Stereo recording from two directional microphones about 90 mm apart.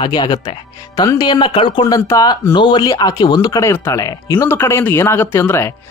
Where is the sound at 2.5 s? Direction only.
60° left (ahead or behind).